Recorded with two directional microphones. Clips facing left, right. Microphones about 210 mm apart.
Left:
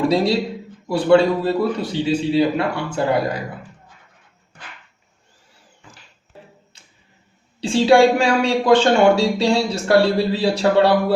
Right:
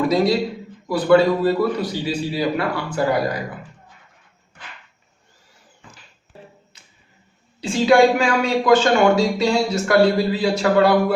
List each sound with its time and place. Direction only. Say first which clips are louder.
0.1 s a man's voice: even; 30° left (ahead or behind)
7.6 s speech: left 1 dB; 30° left (ahead or behind)